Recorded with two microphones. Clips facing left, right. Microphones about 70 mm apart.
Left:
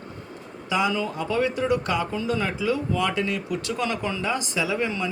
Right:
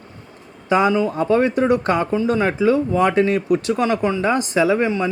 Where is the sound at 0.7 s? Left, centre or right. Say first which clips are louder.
Right 8 dB; right.